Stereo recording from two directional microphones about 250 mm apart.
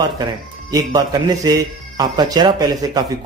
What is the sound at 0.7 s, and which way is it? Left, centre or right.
Speech, centre.